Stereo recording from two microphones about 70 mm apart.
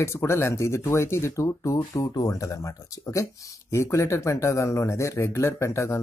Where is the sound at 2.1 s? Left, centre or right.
Left.